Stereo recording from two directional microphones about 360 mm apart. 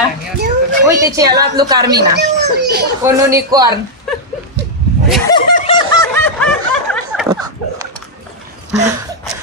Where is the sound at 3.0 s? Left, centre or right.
Centre.